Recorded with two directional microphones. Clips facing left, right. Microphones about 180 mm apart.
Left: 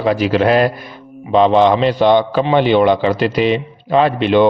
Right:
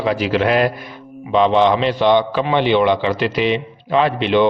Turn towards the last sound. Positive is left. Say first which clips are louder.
# left 3 dB
turn(degrees=45)  # may be behind; listen again after turning